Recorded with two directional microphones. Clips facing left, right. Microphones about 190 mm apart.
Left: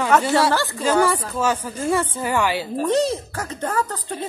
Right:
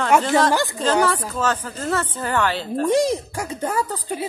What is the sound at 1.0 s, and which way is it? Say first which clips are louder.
A woman's voice: left 1 dB; 10° left (ahead or behind).